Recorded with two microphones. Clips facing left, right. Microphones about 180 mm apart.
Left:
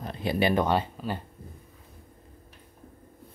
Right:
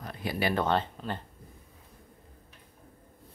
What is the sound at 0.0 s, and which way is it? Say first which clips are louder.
Speech: left 5 dB; 25° left (ahead or behind).